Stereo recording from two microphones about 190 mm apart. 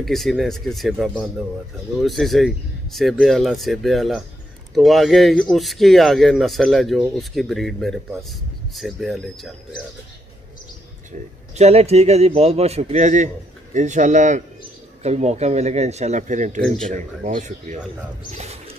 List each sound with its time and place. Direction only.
0.0 s speech: centre (ahead or behind)
11.1 s speech: 35° right (ahead or behind)